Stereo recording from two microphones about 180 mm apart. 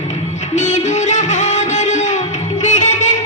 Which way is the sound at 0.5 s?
40° left (ahead or behind).